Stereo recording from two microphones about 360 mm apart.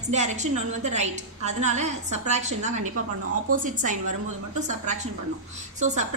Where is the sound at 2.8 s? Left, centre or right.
Right.